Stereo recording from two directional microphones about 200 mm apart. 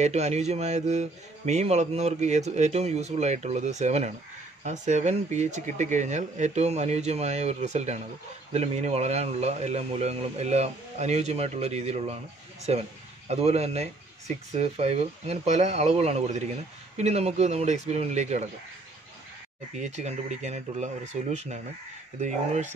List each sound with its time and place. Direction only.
0.0 s speech: 35° right (ahead or behind)
19.7 s speech: 35° right (ahead or behind)